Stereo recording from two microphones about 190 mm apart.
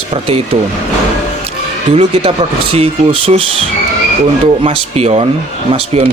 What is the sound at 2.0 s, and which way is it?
Speech, 35° right (ahead or behind).